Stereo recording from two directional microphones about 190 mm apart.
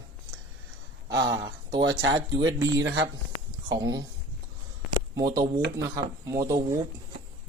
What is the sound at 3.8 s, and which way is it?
Speech, 20° right (ahead or behind).